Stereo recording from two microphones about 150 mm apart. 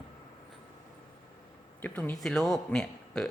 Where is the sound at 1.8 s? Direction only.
10° left (ahead or behind).